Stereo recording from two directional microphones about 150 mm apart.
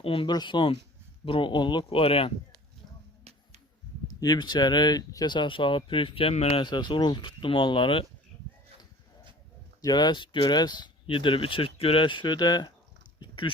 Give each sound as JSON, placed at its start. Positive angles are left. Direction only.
{"t": 0.0, "sound": "speech", "side_deg": 35}
{"t": 4.1, "sound": "speech", "side_deg": 25}
{"t": 9.8, "sound": "speech", "side_deg": 30}
{"t": 13.1, "sound": "a sound", "side_deg": 35}